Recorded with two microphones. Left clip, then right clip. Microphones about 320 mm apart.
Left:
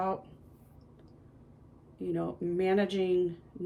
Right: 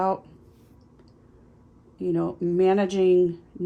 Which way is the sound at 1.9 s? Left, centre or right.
Centre.